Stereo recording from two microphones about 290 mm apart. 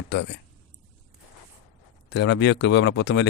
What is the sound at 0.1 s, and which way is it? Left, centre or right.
Speech, left.